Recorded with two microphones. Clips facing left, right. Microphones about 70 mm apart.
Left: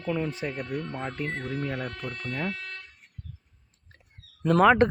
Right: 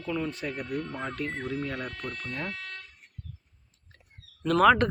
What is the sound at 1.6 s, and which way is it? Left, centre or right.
Speech, centre.